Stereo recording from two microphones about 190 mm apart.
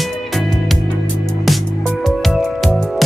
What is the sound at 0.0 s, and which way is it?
Music, centre (ahead or behind).